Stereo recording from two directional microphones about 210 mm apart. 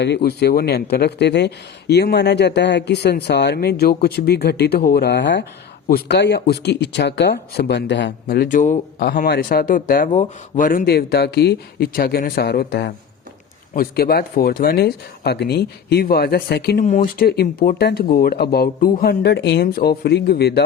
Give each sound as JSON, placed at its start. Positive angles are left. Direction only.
{"t": 0.0, "sound": "speech", "side_deg": 50}
{"t": 16.8, "sound": "speech", "side_deg": 35}